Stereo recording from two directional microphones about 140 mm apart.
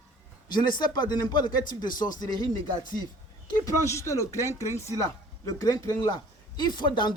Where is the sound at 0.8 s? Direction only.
30° left (ahead or behind).